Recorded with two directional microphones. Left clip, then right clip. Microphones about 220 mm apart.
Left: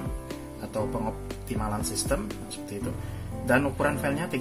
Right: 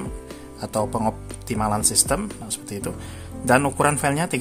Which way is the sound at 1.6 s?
40° right (ahead or behind).